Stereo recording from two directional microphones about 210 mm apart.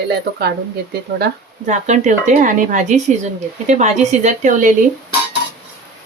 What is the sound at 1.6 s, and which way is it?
Speech, 35° right (ahead or behind).